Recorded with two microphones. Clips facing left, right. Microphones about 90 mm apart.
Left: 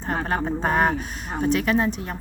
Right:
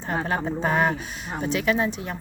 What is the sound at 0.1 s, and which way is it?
A woman's voice, 45° left (ahead or behind).